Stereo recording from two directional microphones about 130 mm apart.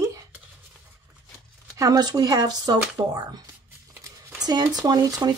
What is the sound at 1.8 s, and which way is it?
Speech, 30° right (ahead or behind).